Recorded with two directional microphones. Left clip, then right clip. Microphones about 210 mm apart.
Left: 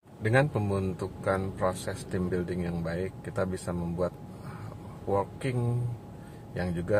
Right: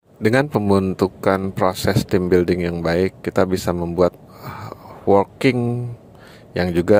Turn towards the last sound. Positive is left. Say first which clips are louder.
# right 15 dB
turn(degrees=-45)  # may be behind; listen again after turning